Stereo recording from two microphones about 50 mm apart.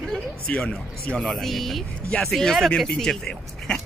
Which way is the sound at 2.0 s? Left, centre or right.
Left.